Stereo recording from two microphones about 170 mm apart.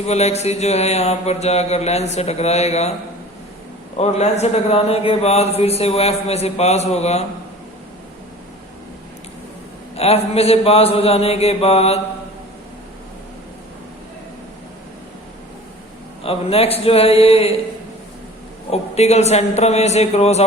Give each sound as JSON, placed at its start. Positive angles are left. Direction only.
{"t": 0.0, "sound": "a man's voice", "side_deg": 40}
{"t": 3.9, "sound": "a man's voice", "side_deg": 40}
{"t": 9.9, "sound": "a man's voice", "side_deg": 35}
{"t": 16.2, "sound": "a man's voice", "side_deg": 35}
{"t": 18.7, "sound": "a man's voice", "side_deg": 40}